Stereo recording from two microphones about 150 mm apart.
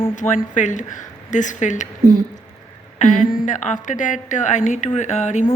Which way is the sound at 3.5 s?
55° left (ahead or behind).